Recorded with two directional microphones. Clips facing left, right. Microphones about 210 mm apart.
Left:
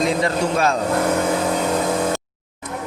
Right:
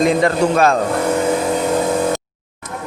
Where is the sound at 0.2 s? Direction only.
55° right (ahead or behind).